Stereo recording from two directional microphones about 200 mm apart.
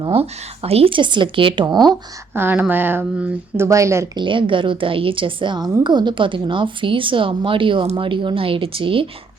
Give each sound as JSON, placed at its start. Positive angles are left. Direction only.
{"t": 0.0, "sound": "speech", "side_deg": -30}
{"t": 2.3, "sound": "speech", "side_deg": -10}